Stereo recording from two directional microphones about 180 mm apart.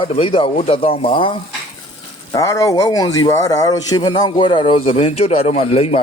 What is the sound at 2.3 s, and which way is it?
Speech, 15° left (ahead or behind).